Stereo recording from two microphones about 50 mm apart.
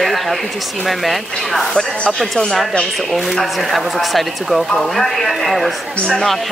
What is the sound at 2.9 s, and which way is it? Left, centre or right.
Speech, centre.